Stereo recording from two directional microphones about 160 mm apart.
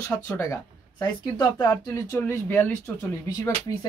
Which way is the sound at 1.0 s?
25° left (ahead or behind).